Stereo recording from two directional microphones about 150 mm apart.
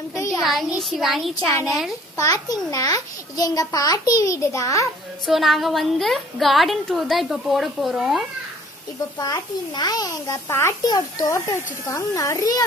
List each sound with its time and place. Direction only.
0.1 s a sound: 20° left (ahead or behind)
0.4 s a woman's voice: centre (ahead or behind)
2.1 s a child's voice: 25° left (ahead or behind)
5.2 s a woman's voice: centre (ahead or behind)
9.2 s a child's voice: 25° left (ahead or behind)